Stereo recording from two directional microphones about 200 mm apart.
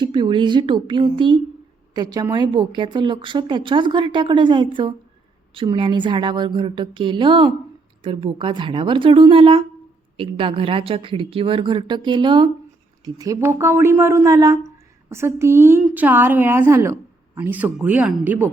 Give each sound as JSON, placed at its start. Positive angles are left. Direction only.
{"t": 0.0, "sound": "a woman's voice", "side_deg": -25}